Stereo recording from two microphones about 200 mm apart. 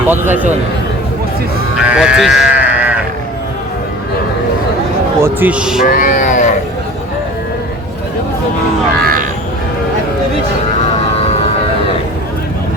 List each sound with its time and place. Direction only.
0.1 s a man's voice: 10° right (ahead or behind)
1.8 s speech: 5° right (ahead or behind)
5.2 s speech: 10° right (ahead or behind)
5.8 s a sound: 45° left (ahead or behind)